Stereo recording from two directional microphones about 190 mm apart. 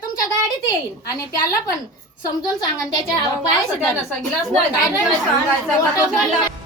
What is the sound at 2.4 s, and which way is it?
Speech, 20° left (ahead or behind).